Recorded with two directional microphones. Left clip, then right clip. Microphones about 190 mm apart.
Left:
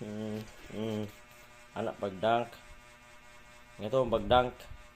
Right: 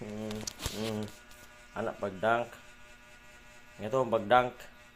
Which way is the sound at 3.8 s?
15° left (ahead or behind).